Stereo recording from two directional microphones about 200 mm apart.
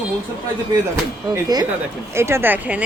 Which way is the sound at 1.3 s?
20° right (ahead or behind).